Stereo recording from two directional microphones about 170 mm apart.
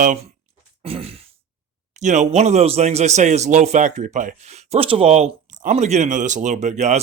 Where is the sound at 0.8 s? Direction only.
35° right (ahead or behind).